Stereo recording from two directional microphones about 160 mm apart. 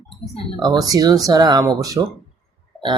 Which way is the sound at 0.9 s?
25° right (ahead or behind).